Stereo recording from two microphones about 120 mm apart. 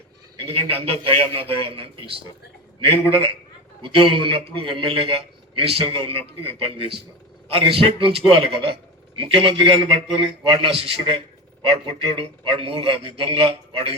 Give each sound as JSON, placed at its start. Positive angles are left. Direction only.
{"t": 0.7, "sound": "a man's voice", "side_deg": -50}